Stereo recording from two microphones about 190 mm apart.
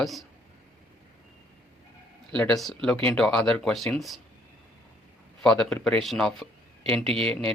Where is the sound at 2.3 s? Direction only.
5° left (ahead or behind).